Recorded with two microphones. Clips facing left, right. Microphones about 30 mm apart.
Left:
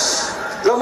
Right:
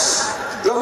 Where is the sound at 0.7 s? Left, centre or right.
Centre.